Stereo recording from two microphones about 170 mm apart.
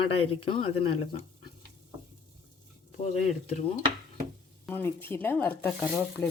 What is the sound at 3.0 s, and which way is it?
Speech, 40° left (ahead or behind).